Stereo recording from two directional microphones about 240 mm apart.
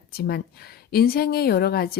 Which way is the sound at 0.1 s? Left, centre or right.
Left.